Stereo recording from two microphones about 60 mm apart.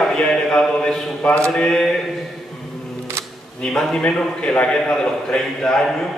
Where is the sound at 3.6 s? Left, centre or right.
Centre.